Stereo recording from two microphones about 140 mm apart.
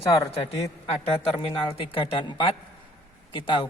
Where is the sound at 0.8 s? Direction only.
45° left (ahead or behind).